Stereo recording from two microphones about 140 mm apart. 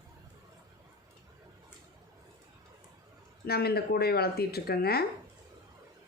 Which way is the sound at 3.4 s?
90° left.